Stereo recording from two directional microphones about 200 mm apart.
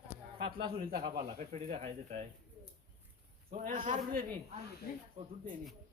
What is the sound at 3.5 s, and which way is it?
A man's voice, 45° right (ahead or behind).